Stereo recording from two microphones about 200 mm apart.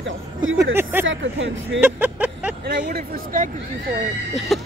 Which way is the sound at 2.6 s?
50° right (ahead or behind).